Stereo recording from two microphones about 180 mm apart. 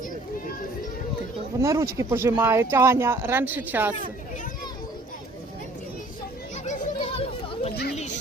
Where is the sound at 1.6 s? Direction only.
15° right (ahead or behind).